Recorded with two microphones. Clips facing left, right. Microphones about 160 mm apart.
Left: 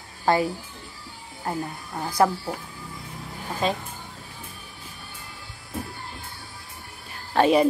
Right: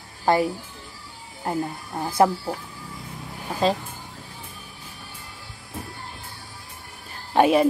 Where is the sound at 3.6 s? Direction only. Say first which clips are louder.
Right 4 dB; 35° right (ahead or behind).